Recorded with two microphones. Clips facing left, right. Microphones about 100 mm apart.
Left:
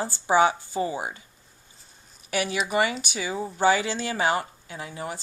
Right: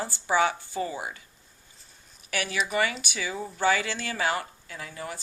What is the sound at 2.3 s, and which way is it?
Speech, 25° left (ahead or behind).